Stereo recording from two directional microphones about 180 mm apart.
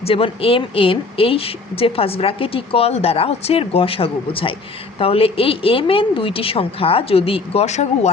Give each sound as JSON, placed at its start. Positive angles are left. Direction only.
{"t": 0.0, "sound": "speech", "side_deg": 30}